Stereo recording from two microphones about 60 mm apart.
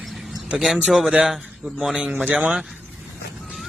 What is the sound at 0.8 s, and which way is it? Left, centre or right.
A man's voice, centre.